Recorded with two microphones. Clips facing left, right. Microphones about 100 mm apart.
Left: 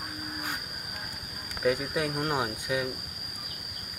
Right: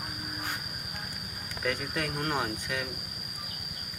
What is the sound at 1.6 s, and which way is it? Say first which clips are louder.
Speech: left 5 dB; 15° left (ahead or behind).